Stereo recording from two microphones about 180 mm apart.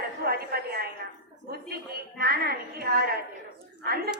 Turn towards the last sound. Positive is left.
turn(degrees=-60)  # may be behind; listen again after turning